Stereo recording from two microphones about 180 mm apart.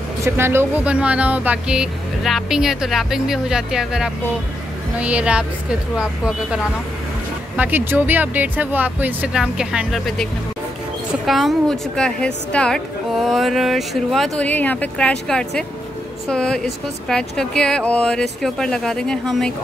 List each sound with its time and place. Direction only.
0.2 s speech: 15° right (ahead or behind)
11.2 s speech: centre (ahead or behind)